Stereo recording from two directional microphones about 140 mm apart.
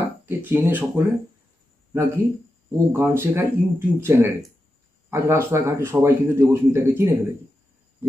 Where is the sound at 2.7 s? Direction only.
20° right (ahead or behind).